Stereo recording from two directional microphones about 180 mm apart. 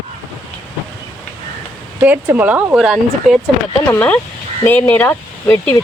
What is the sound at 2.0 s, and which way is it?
Speech, 10° right (ahead or behind).